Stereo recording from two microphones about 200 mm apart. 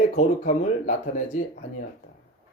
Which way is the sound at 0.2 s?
40° left (ahead or behind).